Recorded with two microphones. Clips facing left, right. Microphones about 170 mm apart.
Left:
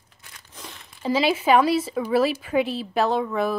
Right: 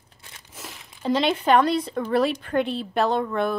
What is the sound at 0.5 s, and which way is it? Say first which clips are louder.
Speech: right 1 dB; 5° right (ahead or behind).